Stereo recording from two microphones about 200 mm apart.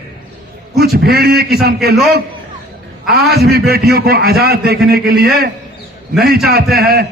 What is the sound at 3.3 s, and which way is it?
A man's voice, 50° right (ahead or behind).